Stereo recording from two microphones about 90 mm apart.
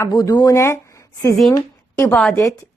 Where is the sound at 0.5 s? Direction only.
30° left (ahead or behind).